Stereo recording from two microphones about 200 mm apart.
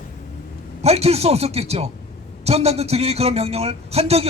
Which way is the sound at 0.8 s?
30° right (ahead or behind).